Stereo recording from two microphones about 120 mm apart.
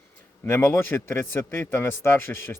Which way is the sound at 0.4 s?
20° left (ahead or behind).